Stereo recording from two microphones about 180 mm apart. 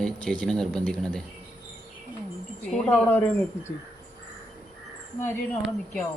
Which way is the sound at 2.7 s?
Centre (ahead or behind).